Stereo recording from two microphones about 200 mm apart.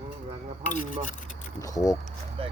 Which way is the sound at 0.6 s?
40° left (ahead or behind).